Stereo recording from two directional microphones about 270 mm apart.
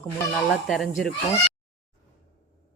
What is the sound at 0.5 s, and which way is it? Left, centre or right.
Speech, centre.